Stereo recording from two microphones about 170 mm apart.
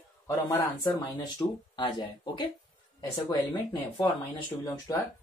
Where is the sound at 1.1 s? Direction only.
25° left (ahead or behind).